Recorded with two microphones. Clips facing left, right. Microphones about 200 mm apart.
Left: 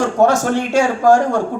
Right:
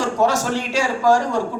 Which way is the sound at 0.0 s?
55° left (ahead or behind).